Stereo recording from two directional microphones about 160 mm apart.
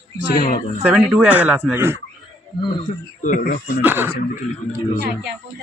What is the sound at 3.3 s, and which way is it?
Speech, 55° left (ahead or behind).